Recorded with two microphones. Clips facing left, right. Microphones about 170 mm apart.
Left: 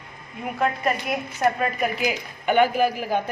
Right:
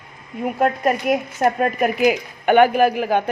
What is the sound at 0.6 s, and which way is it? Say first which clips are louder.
A woman's voice: right 5 dB; 45° right (ahead or behind).